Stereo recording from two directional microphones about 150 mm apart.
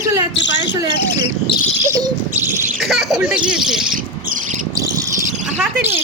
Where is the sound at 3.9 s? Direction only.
60° right (ahead or behind).